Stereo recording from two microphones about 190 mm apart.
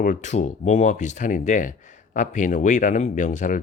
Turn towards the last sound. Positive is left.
turn(degrees=40)  # may be behind; listen again after turning